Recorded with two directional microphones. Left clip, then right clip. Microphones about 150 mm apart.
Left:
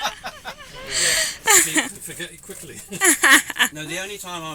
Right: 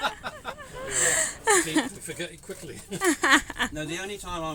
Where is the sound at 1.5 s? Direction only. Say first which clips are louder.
Left 5 dB; 20° right (ahead or behind).